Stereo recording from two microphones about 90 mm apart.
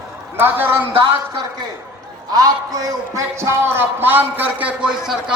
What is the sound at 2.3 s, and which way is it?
A man's voice, 45° right (ahead or behind).